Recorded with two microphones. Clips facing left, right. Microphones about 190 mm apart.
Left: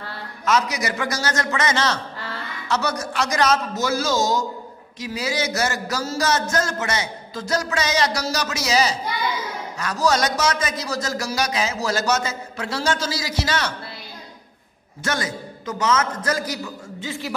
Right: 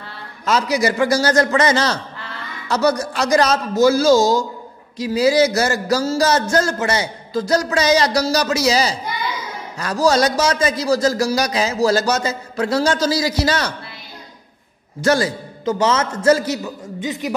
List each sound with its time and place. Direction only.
0.5 s a man's voice: 30° right (ahead or behind)
15.0 s a man's voice: 35° right (ahead or behind); by 17.4 s 20° right (ahead or behind)